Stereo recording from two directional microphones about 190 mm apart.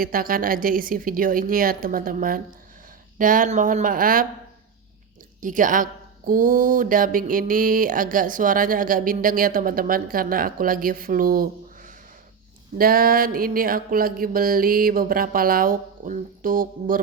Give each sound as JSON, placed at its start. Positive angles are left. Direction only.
{"t": 0.0, "sound": "a woman's voice", "side_deg": -50}
{"t": 5.4, "sound": "a woman's voice", "side_deg": -45}